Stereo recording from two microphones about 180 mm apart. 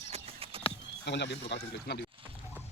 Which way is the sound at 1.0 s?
75° left (ahead or behind).